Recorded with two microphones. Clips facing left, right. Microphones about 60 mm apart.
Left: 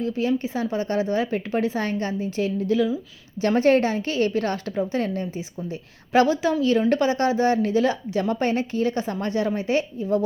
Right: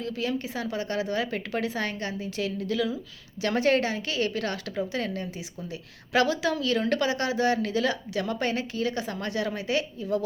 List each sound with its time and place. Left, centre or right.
0.0 s a woman's voice: left